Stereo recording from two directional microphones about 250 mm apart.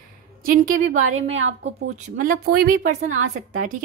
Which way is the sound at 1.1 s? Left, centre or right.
Right.